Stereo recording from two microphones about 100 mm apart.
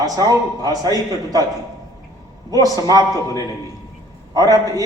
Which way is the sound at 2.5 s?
40° right (ahead or behind).